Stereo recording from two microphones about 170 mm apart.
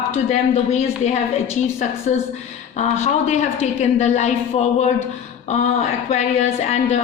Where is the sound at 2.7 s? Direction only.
40° left (ahead or behind).